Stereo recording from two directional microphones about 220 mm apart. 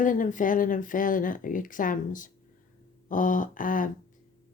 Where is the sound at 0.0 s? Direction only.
35° left (ahead or behind).